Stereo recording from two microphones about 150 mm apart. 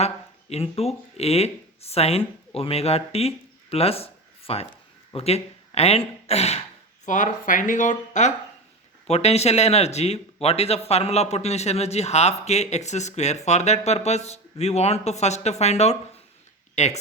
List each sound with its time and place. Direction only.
0.5 s speech: 45° left (ahead or behind)
7.0 s a man's voice: 60° left (ahead or behind)